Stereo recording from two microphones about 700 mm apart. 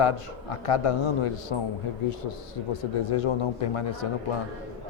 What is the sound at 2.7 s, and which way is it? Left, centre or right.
A man's voice, left.